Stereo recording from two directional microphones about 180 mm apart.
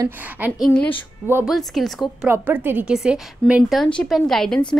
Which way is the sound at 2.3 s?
10° right (ahead or behind).